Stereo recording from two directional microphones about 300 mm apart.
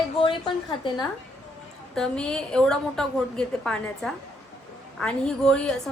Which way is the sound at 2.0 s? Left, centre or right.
Centre.